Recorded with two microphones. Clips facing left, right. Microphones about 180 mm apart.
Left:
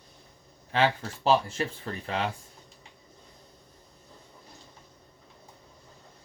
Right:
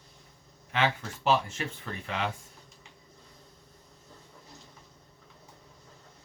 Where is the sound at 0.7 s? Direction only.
35° left (ahead or behind).